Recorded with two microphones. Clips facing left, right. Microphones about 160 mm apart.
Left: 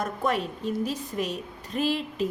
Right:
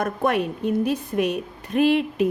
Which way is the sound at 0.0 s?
60° right (ahead or behind).